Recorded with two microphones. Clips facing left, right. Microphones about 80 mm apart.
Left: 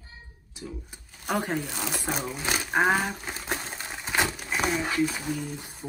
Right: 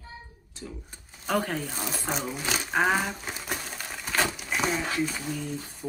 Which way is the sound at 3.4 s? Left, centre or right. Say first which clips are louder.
Left 3 dB; left.